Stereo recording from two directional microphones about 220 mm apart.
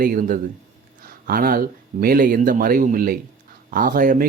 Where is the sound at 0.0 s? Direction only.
40° right (ahead or behind).